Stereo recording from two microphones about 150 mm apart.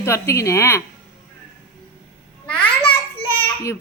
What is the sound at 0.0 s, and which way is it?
Speech, 20° left (ahead or behind).